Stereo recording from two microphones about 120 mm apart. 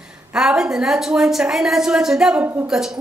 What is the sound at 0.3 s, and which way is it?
Speech, 5° right (ahead or behind).